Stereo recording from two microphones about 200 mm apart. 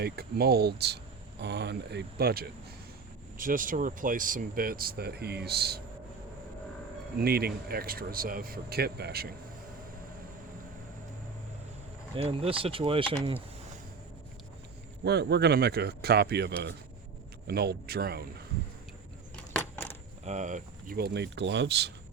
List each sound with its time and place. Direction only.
0.0 s speech: 55° right (ahead or behind)
7.2 s speech: 50° right (ahead or behind)
12.1 s speech: 30° right (ahead or behind)
15.0 s speech: 55° right (ahead or behind)
20.2 s speech: 35° right (ahead or behind); by 21.9 s 60° right (ahead or behind)